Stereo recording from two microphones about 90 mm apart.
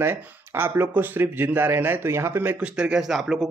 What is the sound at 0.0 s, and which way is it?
Speech, 25° right (ahead or behind).